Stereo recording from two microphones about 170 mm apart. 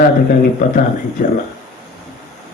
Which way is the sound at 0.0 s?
55° left (ahead or behind).